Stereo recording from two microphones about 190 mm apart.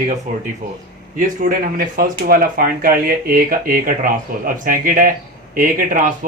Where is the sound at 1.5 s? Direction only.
45° right (ahead or behind).